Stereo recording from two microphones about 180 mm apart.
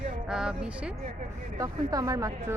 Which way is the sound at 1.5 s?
20° right (ahead or behind).